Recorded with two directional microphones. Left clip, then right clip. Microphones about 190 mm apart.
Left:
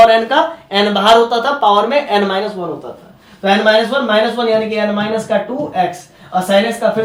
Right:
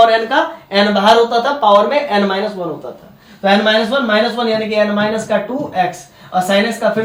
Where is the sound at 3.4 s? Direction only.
15° left (ahead or behind).